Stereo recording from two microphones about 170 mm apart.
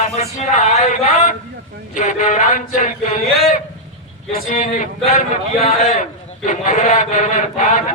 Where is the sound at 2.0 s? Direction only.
45° left (ahead or behind).